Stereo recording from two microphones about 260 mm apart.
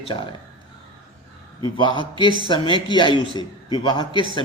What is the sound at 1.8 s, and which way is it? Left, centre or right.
A man's voice, centre.